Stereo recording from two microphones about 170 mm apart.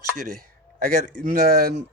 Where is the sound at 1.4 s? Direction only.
65° right (ahead or behind).